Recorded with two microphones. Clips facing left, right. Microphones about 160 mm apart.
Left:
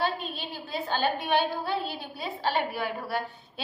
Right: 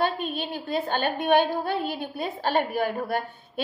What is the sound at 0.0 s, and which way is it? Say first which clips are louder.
A woman's voice: right 4 dB; 55° right (ahead or behind).